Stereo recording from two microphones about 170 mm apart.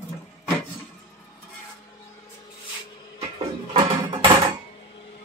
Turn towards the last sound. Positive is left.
turn(degrees=-35)  # may be behind; listen again after turning